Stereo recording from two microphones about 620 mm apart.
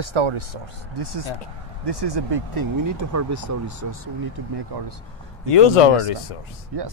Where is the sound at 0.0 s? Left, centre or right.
Right.